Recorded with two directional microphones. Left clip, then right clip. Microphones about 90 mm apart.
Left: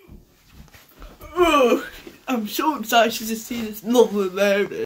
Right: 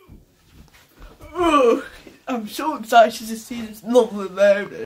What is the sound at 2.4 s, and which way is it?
Speech, 20° right (ahead or behind).